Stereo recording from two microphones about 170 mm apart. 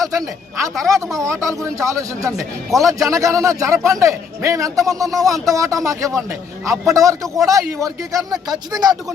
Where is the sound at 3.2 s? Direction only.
20° right (ahead or behind).